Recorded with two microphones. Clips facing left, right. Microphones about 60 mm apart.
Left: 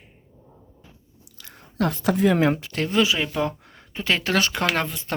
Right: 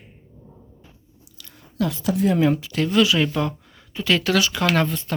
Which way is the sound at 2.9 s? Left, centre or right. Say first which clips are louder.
Right 3 dB; left.